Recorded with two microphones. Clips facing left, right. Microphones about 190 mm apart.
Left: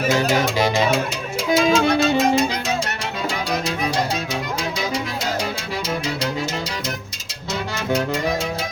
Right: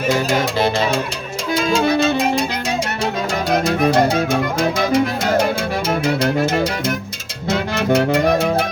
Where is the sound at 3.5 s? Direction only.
55° right (ahead or behind).